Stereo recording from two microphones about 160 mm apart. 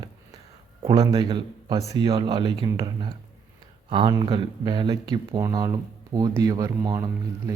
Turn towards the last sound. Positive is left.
turn(degrees=-30)  # may be behind; listen again after turning